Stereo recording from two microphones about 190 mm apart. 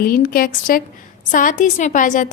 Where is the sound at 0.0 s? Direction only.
50° left (ahead or behind).